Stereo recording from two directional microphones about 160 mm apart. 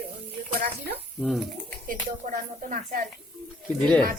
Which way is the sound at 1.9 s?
55° right (ahead or behind).